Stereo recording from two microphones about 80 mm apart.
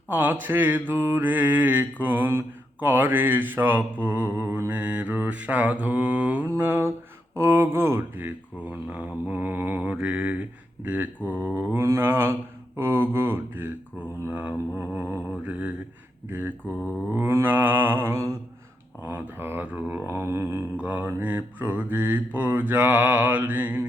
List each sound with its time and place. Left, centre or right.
0.1 s mantra: right
6.6 s mantra: right
11.8 s mantra: right
17.1 s mantra: right
20.7 s mantra: right